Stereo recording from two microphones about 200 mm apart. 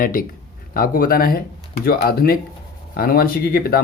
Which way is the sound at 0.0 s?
45° left (ahead or behind).